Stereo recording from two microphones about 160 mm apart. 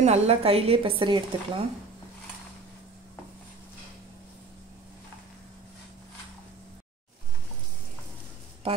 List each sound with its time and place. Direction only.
0.0 s speech: 40° right (ahead or behind)